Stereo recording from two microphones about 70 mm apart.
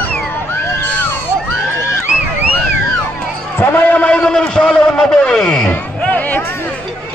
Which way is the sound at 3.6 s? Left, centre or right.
Left.